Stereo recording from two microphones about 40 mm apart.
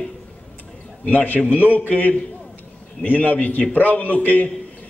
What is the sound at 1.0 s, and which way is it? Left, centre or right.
A man's voice, left.